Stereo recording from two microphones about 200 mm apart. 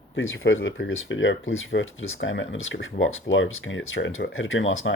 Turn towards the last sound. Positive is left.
turn(degrees=75)  # may be behind; listen again after turning